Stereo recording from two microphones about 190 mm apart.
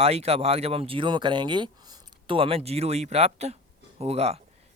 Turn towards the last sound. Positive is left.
turn(degrees=-35)  # may be behind; listen again after turning